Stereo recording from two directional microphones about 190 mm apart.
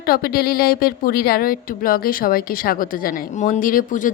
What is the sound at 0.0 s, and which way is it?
A woman's voice, 50° left (ahead or behind).